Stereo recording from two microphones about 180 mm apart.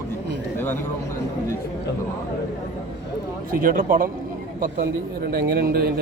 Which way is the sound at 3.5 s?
50° right (ahead or behind).